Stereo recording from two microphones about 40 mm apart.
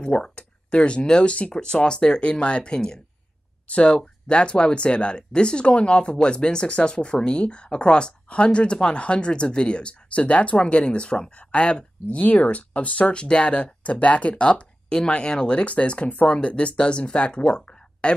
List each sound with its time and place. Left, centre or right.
0.0 s speech: left
12.2 s speech: left